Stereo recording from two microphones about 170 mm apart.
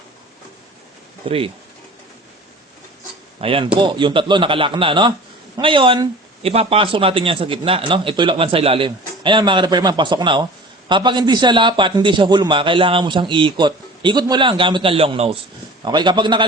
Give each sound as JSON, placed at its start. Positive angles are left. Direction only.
{"t": 1.2, "sound": "speech", "side_deg": -35}
{"t": 3.4, "sound": "a man's voice", "side_deg": -30}